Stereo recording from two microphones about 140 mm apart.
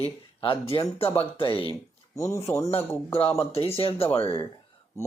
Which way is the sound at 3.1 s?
40° left (ahead or behind).